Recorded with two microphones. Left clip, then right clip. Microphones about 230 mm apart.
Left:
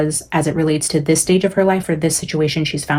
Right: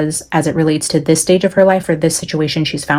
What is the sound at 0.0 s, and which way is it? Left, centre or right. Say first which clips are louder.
Speech: right 2 dB; right.